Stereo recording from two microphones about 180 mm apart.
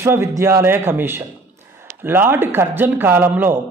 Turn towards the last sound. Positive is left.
turn(degrees=-10)  # may be behind; listen again after turning